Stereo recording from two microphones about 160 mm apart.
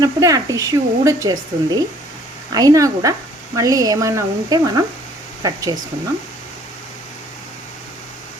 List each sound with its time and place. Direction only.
0.0 s speech: 20° right (ahead or behind)